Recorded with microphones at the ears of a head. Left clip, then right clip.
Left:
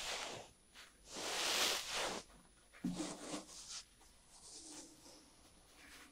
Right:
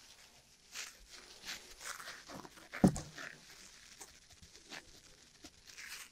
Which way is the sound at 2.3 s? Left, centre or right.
Right.